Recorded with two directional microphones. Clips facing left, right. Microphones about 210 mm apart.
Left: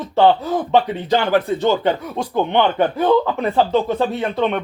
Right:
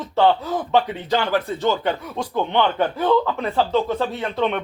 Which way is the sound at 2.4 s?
20° left (ahead or behind).